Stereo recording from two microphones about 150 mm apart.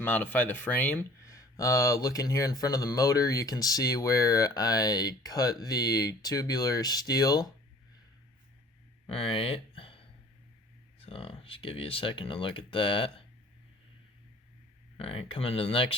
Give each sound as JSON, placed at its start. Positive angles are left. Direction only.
{"t": 0.0, "sound": "speech", "side_deg": 10}
{"t": 9.0, "sound": "speech", "side_deg": 40}
{"t": 11.0, "sound": "speech", "side_deg": 40}
{"t": 14.9, "sound": "speech", "side_deg": 40}